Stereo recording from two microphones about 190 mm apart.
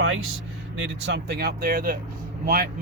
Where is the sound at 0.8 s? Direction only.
75° right (ahead or behind).